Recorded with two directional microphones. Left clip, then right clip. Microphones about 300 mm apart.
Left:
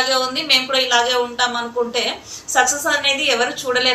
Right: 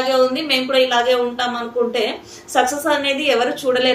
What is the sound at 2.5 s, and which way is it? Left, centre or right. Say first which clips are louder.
A woman's voice: even; centre.